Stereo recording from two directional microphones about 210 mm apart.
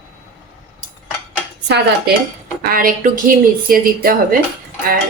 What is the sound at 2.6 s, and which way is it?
Speech, 40° right (ahead or behind).